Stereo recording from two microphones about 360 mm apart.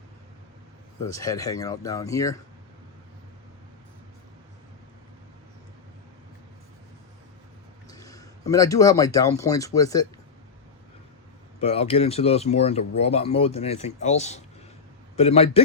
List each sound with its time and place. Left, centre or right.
1.0 s speech: centre
7.9 s a man's voice: centre
11.6 s speech: centre